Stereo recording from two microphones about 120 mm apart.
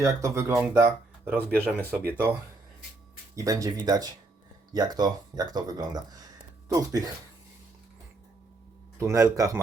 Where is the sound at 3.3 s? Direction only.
30° right (ahead or behind).